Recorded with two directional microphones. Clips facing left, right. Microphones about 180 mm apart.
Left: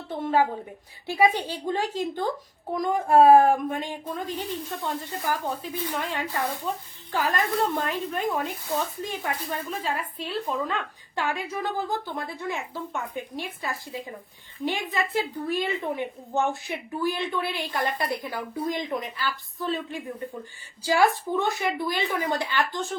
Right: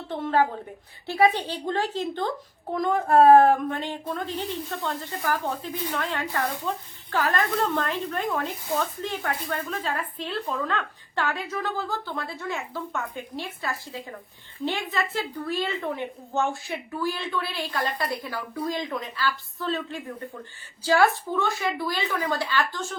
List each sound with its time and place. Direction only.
0.1 s a woman's voice: 10° left (ahead or behind)